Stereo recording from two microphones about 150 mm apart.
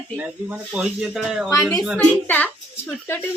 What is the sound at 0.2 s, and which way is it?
Speech, 10° right (ahead or behind).